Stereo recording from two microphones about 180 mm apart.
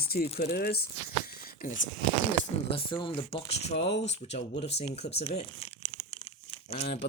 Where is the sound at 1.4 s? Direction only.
55° left (ahead or behind).